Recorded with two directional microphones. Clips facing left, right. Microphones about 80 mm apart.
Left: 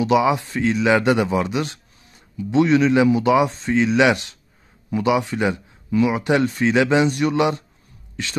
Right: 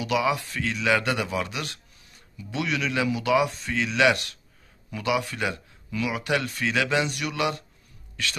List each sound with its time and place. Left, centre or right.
0.0 s speech: left